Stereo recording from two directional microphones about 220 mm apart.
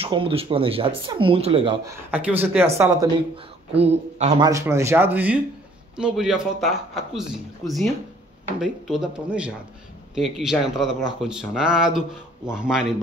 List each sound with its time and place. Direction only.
0.0 s speech: 25° right (ahead or behind)
1.9 s speech: 10° right (ahead or behind)
3.7 s speech: 30° right (ahead or behind)
4.5 s speech: 15° right (ahead or behind)